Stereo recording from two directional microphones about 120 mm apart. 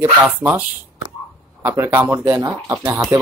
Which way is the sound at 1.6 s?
20° right (ahead or behind).